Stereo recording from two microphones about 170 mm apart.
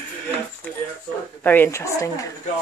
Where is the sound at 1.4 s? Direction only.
10° left (ahead or behind).